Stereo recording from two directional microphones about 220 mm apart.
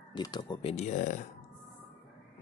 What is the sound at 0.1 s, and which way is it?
Speech, 20° left (ahead or behind).